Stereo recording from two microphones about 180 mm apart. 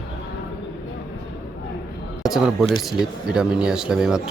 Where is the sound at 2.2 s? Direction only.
Centre (ahead or behind).